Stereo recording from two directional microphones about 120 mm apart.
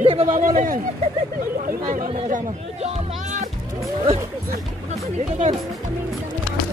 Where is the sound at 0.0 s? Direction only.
55° right (ahead or behind).